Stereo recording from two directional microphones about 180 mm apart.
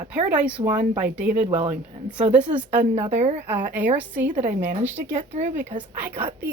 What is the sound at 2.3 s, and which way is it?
Speech, 10° right (ahead or behind).